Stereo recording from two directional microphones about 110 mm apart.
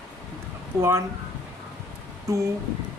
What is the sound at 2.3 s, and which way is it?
Speech, 30° right (ahead or behind).